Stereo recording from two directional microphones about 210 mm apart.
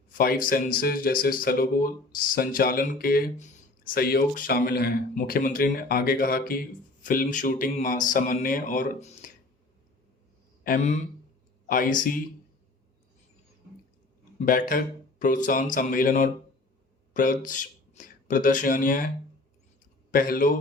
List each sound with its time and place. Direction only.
0.1 s speech: 45° left (ahead or behind)
10.6 s a man's voice: 40° left (ahead or behind)
14.3 s speech: 40° left (ahead or behind)